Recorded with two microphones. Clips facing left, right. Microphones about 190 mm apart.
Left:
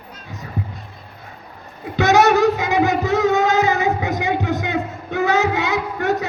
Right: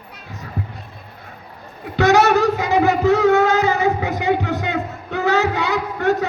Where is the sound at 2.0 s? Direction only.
20° left (ahead or behind).